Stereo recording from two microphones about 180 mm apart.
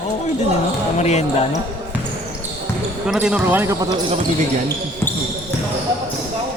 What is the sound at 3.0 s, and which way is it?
Speech, 5° right (ahead or behind).